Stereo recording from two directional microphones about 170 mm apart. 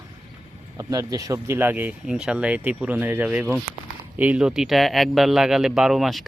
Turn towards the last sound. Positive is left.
turn(degrees=0)  # may be behind; listen again after turning